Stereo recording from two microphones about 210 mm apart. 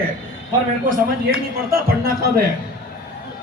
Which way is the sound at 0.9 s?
45° right (ahead or behind).